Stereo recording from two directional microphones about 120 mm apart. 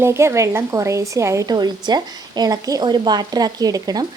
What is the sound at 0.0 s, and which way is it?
A woman's voice, 20° right (ahead or behind).